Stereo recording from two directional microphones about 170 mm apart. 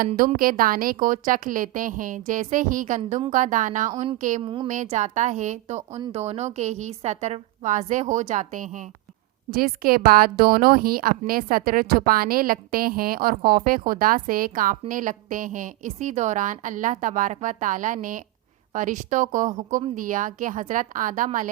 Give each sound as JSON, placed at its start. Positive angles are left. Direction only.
{"t": 0.3, "sound": "a woman's voice", "side_deg": -55}
{"t": 4.4, "sound": "a woman's voice", "side_deg": -30}
{"t": 4.7, "sound": "a woman's voice", "side_deg": -45}